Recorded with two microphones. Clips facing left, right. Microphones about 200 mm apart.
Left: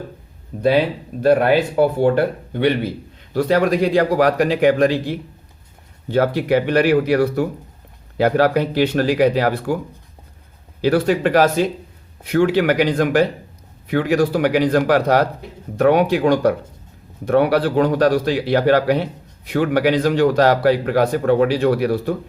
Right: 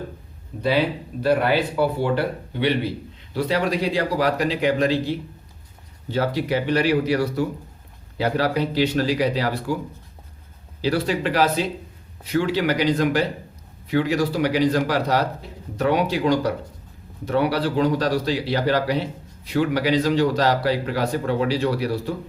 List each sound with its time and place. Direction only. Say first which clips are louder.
0.5 s a sound: left 8 dB; 45° left (ahead or behind)
1.2 s a man's voice: left 5 dB; 50° left (ahead or behind)
10.8 s a man's voice: left 6 dB; 55° left (ahead or behind)